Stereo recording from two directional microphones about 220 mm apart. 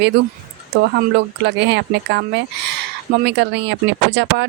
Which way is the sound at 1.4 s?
50° right (ahead or behind).